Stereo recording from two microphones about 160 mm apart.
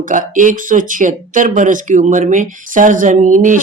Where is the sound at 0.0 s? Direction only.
55° right (ahead or behind).